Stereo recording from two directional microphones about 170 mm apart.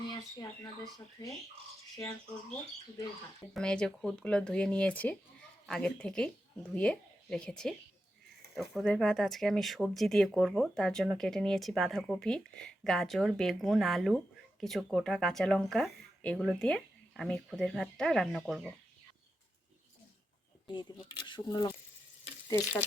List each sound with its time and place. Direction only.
0.1 s speech: 20° left (ahead or behind)
3.5 s speech: 5° left (ahead or behind)
20.7 s speech: 25° left (ahead or behind)